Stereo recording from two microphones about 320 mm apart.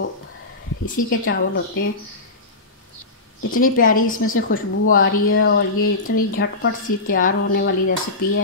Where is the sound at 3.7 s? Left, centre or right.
Left.